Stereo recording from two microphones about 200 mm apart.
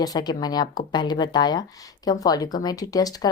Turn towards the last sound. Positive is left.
turn(degrees=20)  # may be behind; listen again after turning